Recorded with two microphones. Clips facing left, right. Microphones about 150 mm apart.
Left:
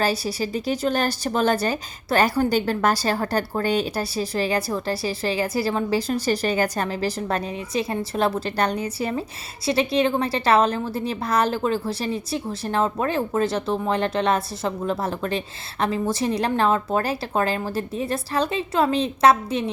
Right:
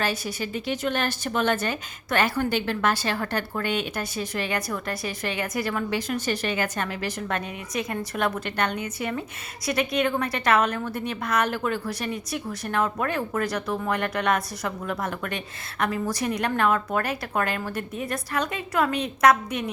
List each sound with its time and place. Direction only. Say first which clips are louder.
0.0 s a woman's voice: left 5 dB; 35° left (ahead or behind)